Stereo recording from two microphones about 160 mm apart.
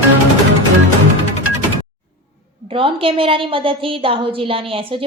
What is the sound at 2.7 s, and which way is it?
A woman's voice, 35° right (ahead or behind).